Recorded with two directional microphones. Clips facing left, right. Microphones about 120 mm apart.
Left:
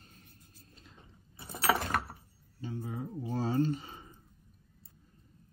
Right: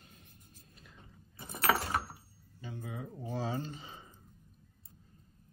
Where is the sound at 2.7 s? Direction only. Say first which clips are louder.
Left 4 dB; 40° left (ahead or behind).